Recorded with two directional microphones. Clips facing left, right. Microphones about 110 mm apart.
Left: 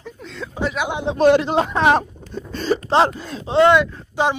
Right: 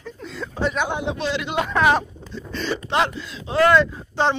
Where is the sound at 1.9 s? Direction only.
45° left (ahead or behind).